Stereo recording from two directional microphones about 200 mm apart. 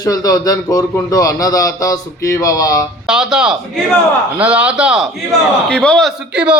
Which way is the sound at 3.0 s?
5° right (ahead or behind).